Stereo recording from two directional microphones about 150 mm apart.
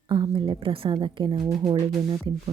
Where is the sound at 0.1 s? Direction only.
35° right (ahead or behind).